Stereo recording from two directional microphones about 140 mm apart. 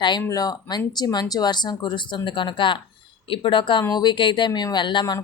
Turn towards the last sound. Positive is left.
turn(degrees=30)  # may be behind; listen again after turning